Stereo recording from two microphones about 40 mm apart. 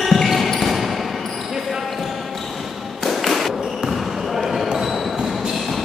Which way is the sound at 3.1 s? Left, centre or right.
Centre.